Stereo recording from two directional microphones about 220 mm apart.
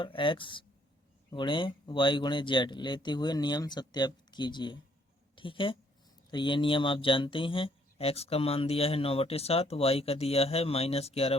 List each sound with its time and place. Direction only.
0.0 s a woman's voice: 20° left (ahead or behind)